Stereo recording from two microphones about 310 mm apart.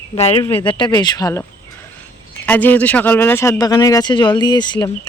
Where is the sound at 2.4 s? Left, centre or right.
Centre.